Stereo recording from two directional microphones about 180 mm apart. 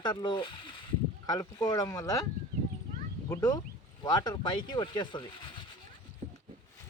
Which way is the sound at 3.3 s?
20° left (ahead or behind).